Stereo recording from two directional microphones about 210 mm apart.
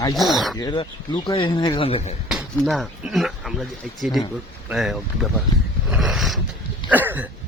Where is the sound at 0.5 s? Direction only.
20° left (ahead or behind).